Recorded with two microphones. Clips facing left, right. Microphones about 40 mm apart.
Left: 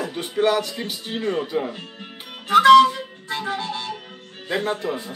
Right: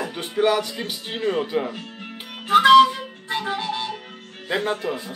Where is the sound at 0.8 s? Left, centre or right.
Right.